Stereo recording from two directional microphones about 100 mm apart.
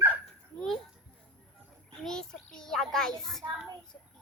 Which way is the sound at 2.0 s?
5° left (ahead or behind).